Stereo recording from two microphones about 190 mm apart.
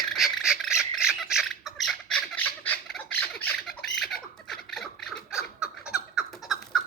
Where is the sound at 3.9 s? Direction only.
Centre (ahead or behind).